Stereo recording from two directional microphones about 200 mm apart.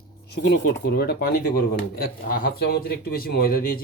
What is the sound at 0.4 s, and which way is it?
Speech, 55° left (ahead or behind).